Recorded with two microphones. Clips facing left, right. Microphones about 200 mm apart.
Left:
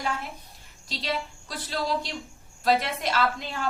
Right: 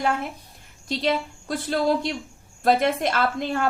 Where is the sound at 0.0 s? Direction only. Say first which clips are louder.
Right 7 dB; 55° right (ahead or behind).